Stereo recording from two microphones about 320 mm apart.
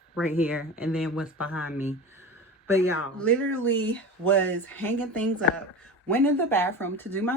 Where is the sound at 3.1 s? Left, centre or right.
Centre.